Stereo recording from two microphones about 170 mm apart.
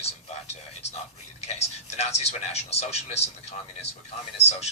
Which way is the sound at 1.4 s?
40° left (ahead or behind).